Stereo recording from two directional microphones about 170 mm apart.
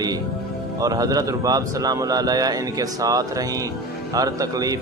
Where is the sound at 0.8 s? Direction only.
20° right (ahead or behind).